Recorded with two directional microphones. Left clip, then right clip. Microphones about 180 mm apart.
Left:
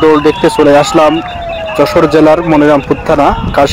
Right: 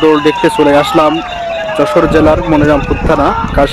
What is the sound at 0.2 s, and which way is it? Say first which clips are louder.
Speech: left 1 dB; 15° left (ahead or behind).